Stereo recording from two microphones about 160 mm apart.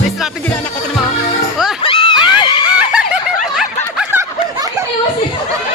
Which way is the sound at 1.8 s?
35° left (ahead or behind).